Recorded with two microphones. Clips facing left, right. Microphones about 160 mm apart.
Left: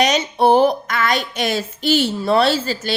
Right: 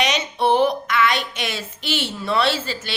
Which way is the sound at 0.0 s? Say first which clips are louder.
Left 5 dB; 40° left (ahead or behind).